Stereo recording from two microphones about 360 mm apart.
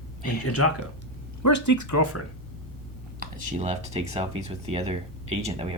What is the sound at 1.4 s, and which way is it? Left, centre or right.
Speech, left.